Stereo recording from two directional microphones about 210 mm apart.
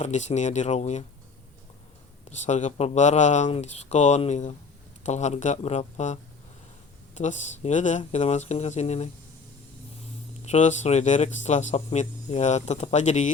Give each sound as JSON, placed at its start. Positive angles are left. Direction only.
{"t": 0.0, "sound": "speech", "side_deg": 35}
{"t": 2.5, "sound": "speech", "side_deg": 35}
{"t": 10.4, "sound": "speech", "side_deg": 35}